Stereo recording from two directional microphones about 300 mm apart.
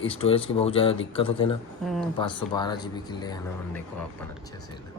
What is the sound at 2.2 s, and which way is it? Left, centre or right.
Speech, centre.